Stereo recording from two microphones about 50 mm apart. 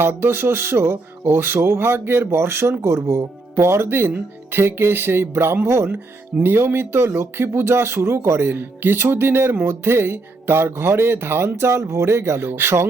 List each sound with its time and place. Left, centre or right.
0.0 s speech: right
6.4 s speech: right
12.5 s speech: right